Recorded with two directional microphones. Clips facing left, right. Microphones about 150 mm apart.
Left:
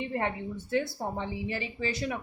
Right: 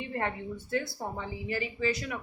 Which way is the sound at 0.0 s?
20° left (ahead or behind).